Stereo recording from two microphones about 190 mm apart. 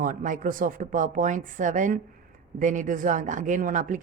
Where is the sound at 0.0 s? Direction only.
45° right (ahead or behind).